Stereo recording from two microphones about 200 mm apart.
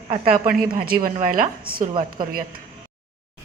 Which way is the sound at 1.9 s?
25° right (ahead or behind).